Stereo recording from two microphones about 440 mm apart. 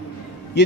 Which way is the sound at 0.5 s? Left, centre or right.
Left.